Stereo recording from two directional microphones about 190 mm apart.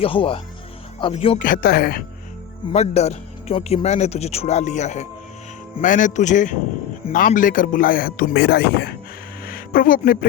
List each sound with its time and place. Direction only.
0.0 s speech: 30° left (ahead or behind)
1.4 s a man's voice: 50° left (ahead or behind)
2.7 s a man's voice: 35° left (ahead or behind); by 9.0 s 55° left (ahead or behind)
9.4 s a sound: 50° left (ahead or behind)